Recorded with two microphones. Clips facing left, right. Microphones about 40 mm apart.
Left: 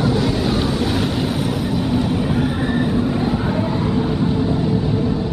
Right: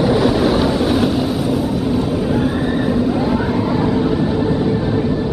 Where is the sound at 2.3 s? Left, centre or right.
Centre.